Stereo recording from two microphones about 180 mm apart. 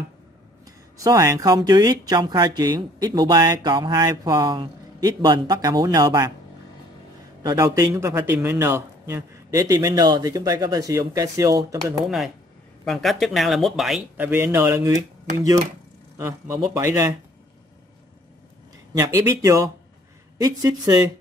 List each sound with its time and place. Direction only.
0.7 s speech: 20° right (ahead or behind)
7.4 s a man's voice: 20° right (ahead or behind)
12.8 s a man's voice: centre (ahead or behind); by 17.1 s 20° right (ahead or behind)
18.9 s a man's voice: 15° right (ahead or behind)